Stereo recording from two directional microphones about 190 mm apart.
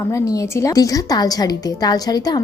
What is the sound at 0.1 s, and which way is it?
A woman's voice, 15° left (ahead or behind).